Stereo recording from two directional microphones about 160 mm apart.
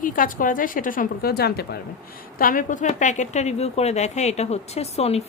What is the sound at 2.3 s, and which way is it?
A woman's voice, 60° left (ahead or behind).